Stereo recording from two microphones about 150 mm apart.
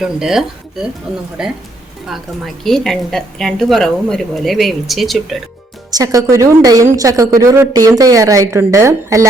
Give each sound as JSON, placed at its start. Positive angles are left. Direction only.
{"t": 0.0, "sound": "a woman's voice", "side_deg": -5}
{"t": 5.9, "sound": "a woman's voice", "side_deg": -25}